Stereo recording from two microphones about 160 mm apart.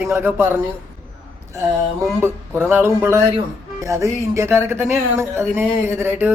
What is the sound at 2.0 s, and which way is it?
Speech, 15° right (ahead or behind).